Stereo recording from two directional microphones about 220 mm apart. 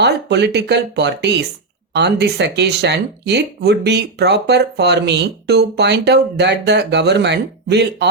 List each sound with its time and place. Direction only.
0.0 s speech: 50° right (ahead or behind)